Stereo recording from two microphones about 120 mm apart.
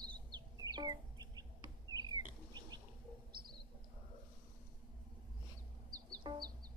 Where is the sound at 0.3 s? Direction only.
35° right (ahead or behind).